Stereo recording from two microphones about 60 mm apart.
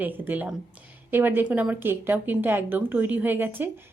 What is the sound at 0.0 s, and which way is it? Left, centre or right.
A woman's voice, right.